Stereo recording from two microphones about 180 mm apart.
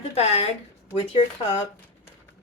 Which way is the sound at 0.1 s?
35° left (ahead or behind).